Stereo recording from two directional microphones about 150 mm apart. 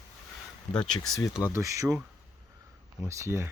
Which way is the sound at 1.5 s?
20° right (ahead or behind).